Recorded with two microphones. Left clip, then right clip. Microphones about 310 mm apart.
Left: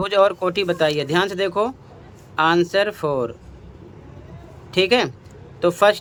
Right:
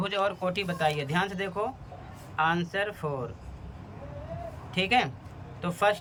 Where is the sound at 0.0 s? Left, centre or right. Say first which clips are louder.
Left 11 dB; centre.